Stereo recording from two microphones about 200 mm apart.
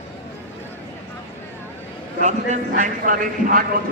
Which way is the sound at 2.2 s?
40° right (ahead or behind).